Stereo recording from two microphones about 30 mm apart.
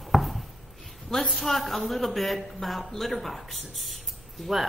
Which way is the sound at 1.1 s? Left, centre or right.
Centre.